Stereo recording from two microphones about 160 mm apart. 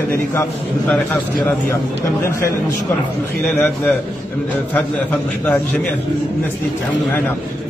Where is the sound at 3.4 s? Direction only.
5° left (ahead or behind).